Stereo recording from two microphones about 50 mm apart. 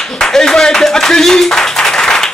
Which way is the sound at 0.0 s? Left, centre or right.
Centre.